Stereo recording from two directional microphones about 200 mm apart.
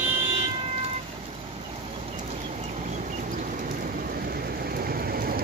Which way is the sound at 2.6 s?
35° right (ahead or behind).